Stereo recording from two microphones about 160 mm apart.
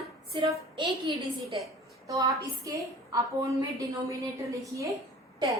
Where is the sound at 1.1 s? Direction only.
30° right (ahead or behind).